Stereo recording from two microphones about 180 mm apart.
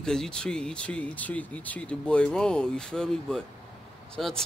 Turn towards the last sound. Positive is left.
turn(degrees=5)  # may be behind; listen again after turning